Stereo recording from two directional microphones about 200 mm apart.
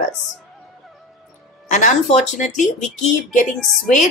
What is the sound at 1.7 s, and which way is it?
Speech, 40° left (ahead or behind).